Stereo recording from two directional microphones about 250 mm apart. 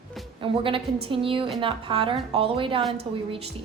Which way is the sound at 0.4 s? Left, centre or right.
Right.